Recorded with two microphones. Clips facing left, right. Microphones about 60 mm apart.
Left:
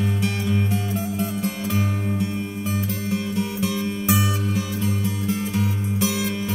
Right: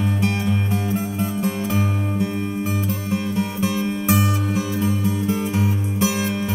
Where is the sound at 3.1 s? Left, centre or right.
Right.